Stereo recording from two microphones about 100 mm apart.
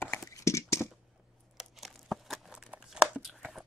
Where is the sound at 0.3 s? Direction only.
30° left (ahead or behind).